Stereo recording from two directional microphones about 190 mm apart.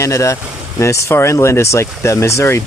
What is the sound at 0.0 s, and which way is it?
Speech, 15° left (ahead or behind).